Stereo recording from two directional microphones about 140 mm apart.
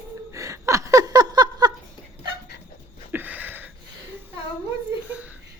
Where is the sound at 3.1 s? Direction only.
15° right (ahead or behind).